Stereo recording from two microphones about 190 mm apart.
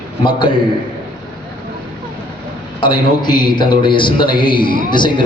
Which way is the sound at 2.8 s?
25° left (ahead or behind).